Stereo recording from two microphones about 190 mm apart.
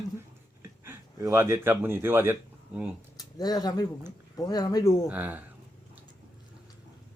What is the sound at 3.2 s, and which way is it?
Speech, 20° left (ahead or behind).